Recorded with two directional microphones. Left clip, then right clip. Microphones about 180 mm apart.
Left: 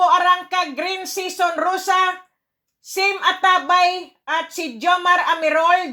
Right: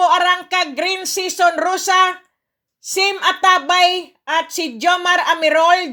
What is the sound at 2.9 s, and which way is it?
A woman's voice, 25° right (ahead or behind).